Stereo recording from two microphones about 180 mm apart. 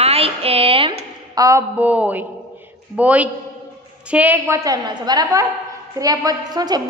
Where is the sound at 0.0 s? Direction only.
35° right (ahead or behind).